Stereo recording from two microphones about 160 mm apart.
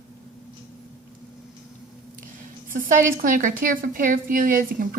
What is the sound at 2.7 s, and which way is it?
A woman's voice, 60° right (ahead or behind).